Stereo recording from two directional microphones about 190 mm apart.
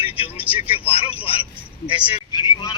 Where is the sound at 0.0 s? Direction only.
30° left (ahead or behind).